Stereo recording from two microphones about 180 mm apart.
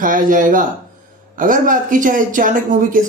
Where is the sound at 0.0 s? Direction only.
50° right (ahead or behind).